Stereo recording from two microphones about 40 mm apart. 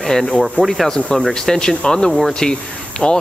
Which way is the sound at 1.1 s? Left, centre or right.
Centre.